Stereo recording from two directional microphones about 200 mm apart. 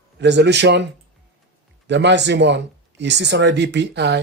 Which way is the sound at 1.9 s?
60° right (ahead or behind).